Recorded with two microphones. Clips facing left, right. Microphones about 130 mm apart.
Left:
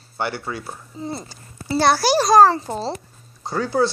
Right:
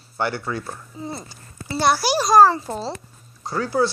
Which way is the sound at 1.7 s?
30° left (ahead or behind).